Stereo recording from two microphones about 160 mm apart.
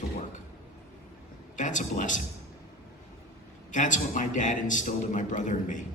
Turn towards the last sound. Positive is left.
turn(degrees=50)  # may be behind; listen again after turning